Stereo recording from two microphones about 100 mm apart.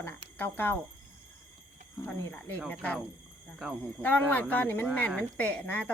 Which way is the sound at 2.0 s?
20° left (ahead or behind).